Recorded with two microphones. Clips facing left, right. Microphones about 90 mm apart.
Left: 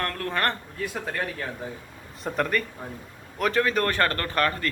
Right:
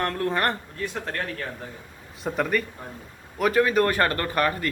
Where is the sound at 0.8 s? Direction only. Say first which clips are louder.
Even; 5° left (ahead or behind).